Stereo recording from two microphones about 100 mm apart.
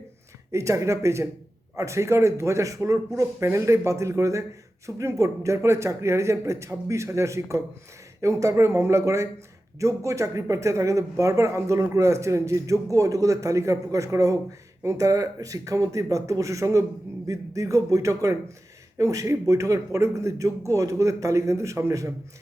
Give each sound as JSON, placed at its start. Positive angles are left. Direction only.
{"t": 0.5, "sound": "a man's voice", "side_deg": -30}